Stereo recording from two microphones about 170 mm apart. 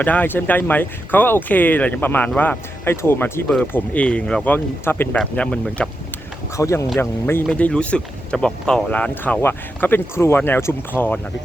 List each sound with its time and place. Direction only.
0.0 s speech: 10° left (ahead or behind)
6.6 s speech: 15° left (ahead or behind)